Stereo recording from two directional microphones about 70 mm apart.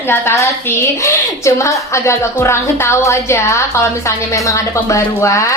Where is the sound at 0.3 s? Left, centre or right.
Left.